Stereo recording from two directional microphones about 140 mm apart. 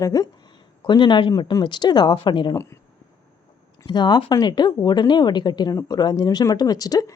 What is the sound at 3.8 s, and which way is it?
Speech, 30° left (ahead or behind).